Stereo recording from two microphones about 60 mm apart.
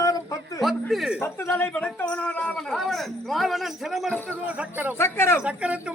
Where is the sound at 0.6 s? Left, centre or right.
Centre.